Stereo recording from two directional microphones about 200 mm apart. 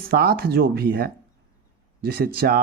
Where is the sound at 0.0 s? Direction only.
50° right (ahead or behind).